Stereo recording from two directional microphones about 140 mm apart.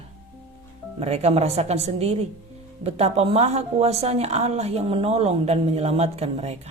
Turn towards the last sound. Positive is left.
turn(degrees=-50)  # may be behind; listen again after turning